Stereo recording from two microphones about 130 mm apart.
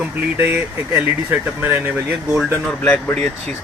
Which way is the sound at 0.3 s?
15° right (ahead or behind).